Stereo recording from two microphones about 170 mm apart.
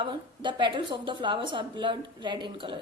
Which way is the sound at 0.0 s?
30° right (ahead or behind).